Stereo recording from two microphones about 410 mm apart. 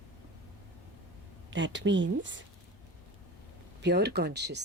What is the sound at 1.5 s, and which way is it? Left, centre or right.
Speech, right.